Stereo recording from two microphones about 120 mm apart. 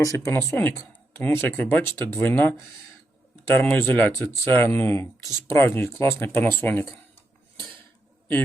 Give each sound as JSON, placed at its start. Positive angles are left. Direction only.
{"t": 0.0, "sound": "speech", "side_deg": 25}